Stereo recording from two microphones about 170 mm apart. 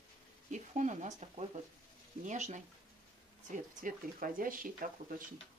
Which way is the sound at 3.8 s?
55° right (ahead or behind).